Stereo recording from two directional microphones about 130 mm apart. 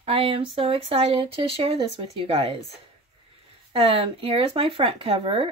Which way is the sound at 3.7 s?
50° right (ahead or behind).